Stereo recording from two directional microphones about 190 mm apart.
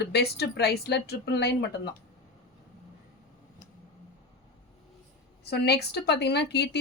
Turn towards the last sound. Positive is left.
turn(degrees=60)  # may be behind; listen again after turning